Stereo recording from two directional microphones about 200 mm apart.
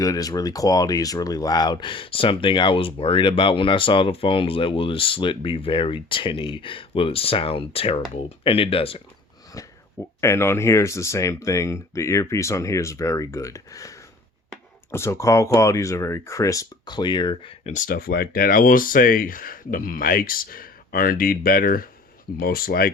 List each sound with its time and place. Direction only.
0.0 s speech: 15° left (ahead or behind)
9.6 s speech: 15° left (ahead or behind); by 22.9 s 50° left (ahead or behind)